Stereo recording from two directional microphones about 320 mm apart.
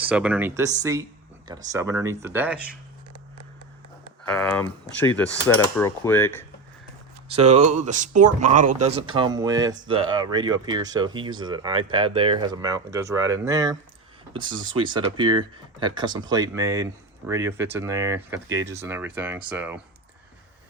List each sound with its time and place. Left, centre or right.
0.0 s speech: centre
4.3 s speech: centre
7.7 s speech: right; by 19.8 s centre